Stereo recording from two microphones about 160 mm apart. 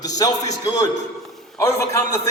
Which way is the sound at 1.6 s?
20° left (ahead or behind).